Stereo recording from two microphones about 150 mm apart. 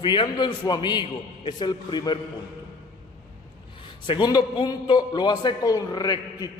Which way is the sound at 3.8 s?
35° left (ahead or behind).